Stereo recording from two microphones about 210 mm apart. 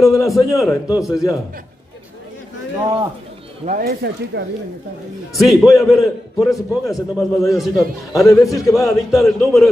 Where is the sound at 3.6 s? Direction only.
45° right (ahead or behind).